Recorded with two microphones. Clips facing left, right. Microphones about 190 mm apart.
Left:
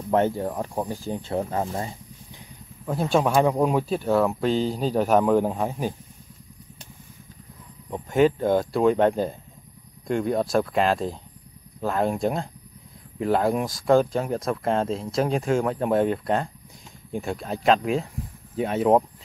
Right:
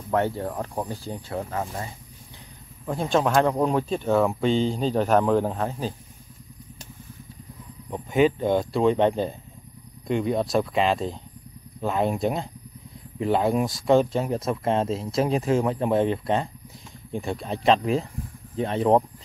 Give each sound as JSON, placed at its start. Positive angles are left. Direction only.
{"t": 0.1, "sound": "speech", "side_deg": 15}
{"t": 1.3, "sound": "speech", "side_deg": 25}
{"t": 2.8, "sound": "speech", "side_deg": 5}
{"t": 7.9, "sound": "speech", "side_deg": 0}